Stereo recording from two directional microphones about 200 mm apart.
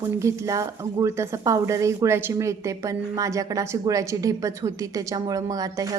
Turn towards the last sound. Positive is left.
turn(degrees=-15)  # may be behind; listen again after turning